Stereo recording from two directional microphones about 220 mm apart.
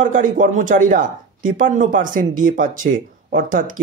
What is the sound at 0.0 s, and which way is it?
Speech, 35° right (ahead or behind).